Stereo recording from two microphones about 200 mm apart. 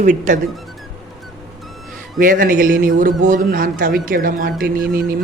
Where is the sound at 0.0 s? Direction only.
40° right (ahead or behind).